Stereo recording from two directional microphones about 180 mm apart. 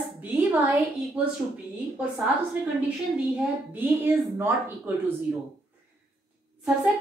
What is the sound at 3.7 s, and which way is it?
A child's voice, 10° right (ahead or behind).